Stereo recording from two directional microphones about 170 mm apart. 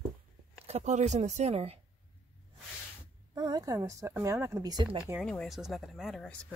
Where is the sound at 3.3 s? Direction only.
25° right (ahead or behind).